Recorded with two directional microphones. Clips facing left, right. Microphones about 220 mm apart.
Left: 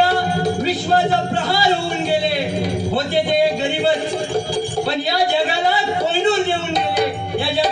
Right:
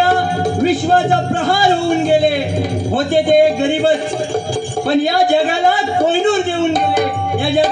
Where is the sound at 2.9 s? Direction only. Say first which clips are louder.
Right 8 dB; 50° right (ahead or behind).